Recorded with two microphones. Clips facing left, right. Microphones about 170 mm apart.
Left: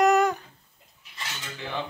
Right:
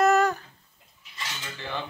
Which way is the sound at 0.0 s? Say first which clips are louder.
Left 1 dB; 15° left (ahead or behind).